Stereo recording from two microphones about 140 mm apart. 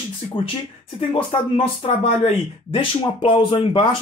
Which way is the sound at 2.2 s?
40° left (ahead or behind).